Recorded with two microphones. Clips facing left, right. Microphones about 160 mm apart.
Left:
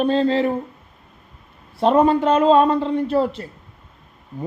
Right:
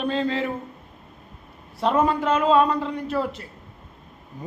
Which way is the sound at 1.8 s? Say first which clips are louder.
Left 6 dB; 30° left (ahead or behind).